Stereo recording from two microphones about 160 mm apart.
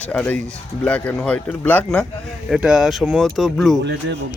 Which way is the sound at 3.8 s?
90° right.